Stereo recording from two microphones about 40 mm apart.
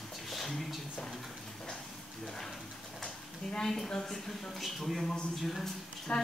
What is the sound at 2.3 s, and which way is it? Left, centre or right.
Speech, centre.